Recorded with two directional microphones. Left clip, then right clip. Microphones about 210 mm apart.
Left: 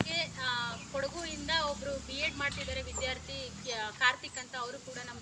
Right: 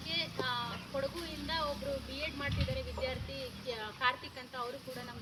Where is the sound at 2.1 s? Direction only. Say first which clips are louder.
Left 5 dB; 5° right (ahead or behind).